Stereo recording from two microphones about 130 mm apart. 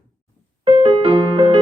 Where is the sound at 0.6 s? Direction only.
40° right (ahead or behind).